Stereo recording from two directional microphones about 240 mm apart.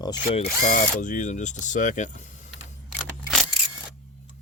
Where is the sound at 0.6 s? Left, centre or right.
Left.